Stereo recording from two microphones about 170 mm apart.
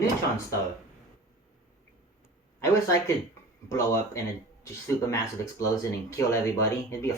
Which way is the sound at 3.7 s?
15° left (ahead or behind).